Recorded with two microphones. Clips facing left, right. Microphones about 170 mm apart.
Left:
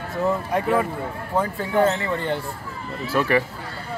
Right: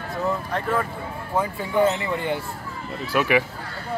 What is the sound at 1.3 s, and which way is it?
Speech, 10° right (ahead or behind).